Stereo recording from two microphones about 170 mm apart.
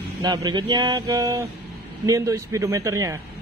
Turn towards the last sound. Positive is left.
turn(degrees=-20)  # may be behind; listen again after turning